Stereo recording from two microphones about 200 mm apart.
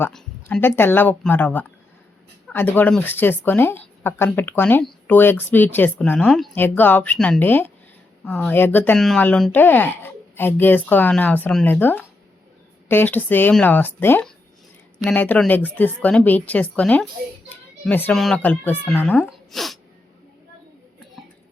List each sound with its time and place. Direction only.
0.0 s speech: 5° left (ahead or behind)